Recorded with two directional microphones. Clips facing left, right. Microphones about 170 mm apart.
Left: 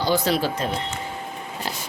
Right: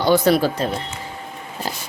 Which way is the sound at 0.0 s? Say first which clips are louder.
Right 6 dB; 55° right (ahead or behind).